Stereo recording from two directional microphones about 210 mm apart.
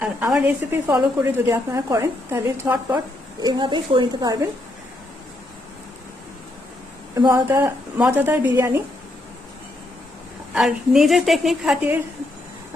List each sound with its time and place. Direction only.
0.0 s a woman's voice: 5° right (ahead or behind)
7.1 s a woman's voice: 15° right (ahead or behind)
10.5 s a woman's voice: centre (ahead or behind)